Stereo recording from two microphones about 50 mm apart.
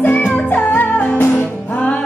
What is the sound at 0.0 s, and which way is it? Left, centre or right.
Music, left.